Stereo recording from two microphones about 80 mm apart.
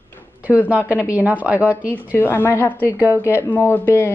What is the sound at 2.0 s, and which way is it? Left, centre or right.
Speech, left.